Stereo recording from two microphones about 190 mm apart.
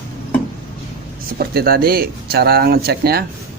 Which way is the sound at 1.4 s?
55° right (ahead or behind).